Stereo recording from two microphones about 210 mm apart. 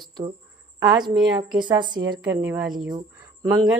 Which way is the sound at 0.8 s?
20° right (ahead or behind).